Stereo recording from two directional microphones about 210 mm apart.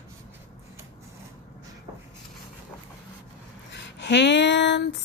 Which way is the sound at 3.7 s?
55° left (ahead or behind).